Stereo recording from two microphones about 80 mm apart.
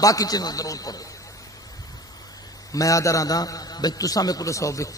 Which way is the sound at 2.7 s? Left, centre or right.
Left.